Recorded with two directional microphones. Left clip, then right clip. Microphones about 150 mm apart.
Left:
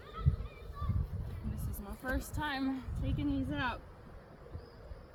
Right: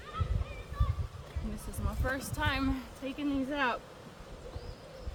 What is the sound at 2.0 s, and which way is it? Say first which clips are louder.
A woman's voice: right 4 dB; 35° right (ahead or behind).